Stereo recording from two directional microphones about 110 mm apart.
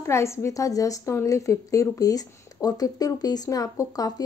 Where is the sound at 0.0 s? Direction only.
25° left (ahead or behind).